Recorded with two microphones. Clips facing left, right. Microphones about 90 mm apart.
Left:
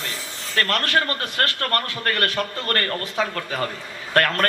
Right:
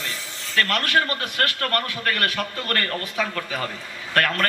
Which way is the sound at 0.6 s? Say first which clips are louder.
Even; 35° left (ahead or behind).